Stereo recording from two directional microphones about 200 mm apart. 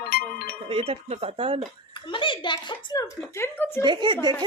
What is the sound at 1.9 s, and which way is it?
A woman's voice, 25° left (ahead or behind).